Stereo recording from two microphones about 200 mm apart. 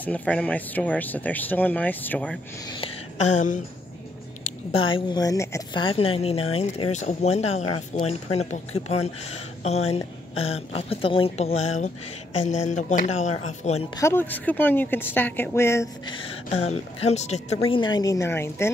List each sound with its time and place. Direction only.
0.0 s speech: 5° left (ahead or behind)
2.7 s speech: 30° left (ahead or behind)
4.7 s a woman's voice: 25° left (ahead or behind)
13.9 s speech: 10° left (ahead or behind)
16.2 s a woman's voice: 30° left (ahead or behind); by 18.7 s 10° left (ahead or behind)